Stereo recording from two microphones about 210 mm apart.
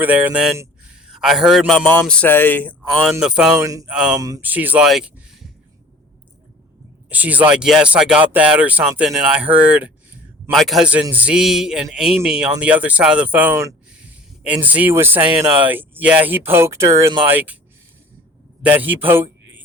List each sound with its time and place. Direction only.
0.0 s speech: 10° right (ahead or behind)
3.6 s speech: 15° right (ahead or behind)
3.8 s speech: 5° right (ahead or behind)
7.1 s speech: 10° right (ahead or behind)
18.6 s speech: 10° right (ahead or behind)